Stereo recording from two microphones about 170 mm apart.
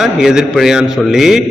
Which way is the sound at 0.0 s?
5° right (ahead or behind).